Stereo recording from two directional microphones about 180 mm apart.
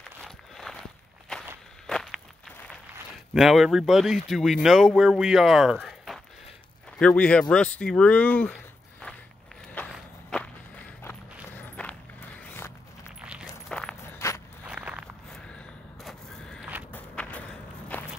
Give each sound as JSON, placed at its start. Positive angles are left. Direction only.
{"t": 0.2, "sound": "walk", "side_deg": 0}
{"t": 3.3, "sound": "speech", "side_deg": 0}
{"t": 9.9, "sound": "walk", "side_deg": 5}
{"t": 11.5, "sound": "walk", "side_deg": 10}
{"t": 13.2, "sound": "keys jangling", "side_deg": -5}
{"t": 14.1, "sound": "walk", "side_deg": 15}
{"t": 14.7, "sound": "walk", "side_deg": -5}
{"t": 15.3, "sound": "a sound", "side_deg": 5}
{"t": 16.9, "sound": "walk", "side_deg": 5}